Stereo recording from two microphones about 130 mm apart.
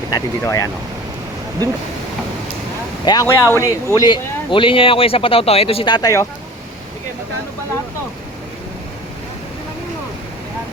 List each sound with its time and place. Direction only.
0.1 s speech: 25° left (ahead or behind)
3.0 s speech: 35° left (ahead or behind)
3.2 s speech: 20° left (ahead or behind); by 6.1 s 35° left (ahead or behind)